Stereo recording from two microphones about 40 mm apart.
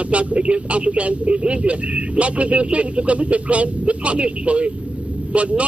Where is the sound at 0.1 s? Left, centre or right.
Right.